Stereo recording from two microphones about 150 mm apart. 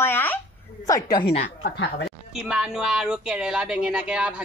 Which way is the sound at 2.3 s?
5° right (ahead or behind).